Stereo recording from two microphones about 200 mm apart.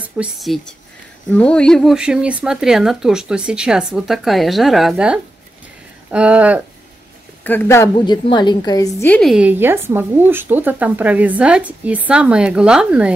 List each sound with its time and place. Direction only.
0.0 s speech: 5° right (ahead or behind)
7.4 s a woman's voice: 10° left (ahead or behind)
9.0 s speech: 5° left (ahead or behind)